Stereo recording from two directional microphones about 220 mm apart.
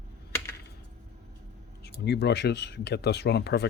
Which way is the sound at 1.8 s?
50° left (ahead or behind).